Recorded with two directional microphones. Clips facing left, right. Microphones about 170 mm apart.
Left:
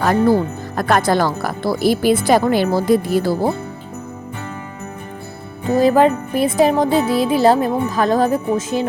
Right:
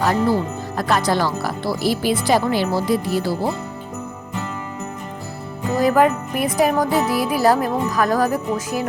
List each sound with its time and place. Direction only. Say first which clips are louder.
0.0 s speech: left 4 dB; 55° left (ahead or behind)
5.6 s music: left 3 dB; 30° left (ahead or behind)